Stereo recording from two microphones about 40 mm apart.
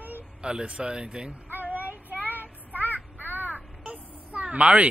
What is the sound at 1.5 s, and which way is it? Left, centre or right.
Child singing, right.